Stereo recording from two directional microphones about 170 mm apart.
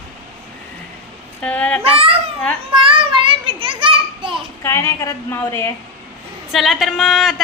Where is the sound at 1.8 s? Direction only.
35° right (ahead or behind).